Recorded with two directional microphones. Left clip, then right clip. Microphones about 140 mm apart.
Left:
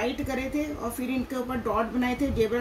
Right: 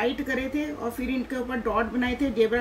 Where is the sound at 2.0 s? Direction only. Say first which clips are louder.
Right 2 dB; 20° right (ahead or behind).